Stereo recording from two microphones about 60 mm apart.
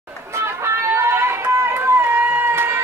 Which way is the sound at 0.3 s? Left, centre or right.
Right.